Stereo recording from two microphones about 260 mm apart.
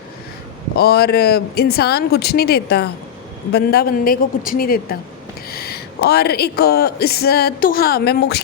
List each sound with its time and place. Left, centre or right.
0.8 s speech: left